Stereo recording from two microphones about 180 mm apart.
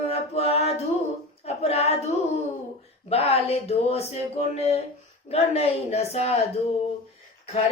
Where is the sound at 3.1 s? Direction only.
35° left (ahead or behind).